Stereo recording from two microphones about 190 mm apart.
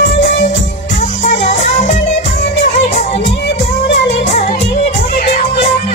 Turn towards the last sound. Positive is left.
turn(degrees=40)  # may be behind; listen again after turning